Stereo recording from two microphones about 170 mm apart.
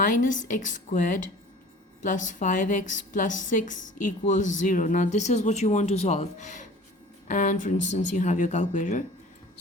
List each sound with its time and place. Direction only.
0.0 s a woman's voice: 50° left (ahead or behind)